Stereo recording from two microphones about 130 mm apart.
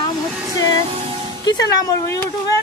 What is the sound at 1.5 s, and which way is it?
Speech, 30° left (ahead or behind).